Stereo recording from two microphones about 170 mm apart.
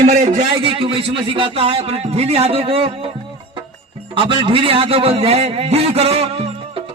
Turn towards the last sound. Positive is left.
turn(degrees=-35)  # may be behind; listen again after turning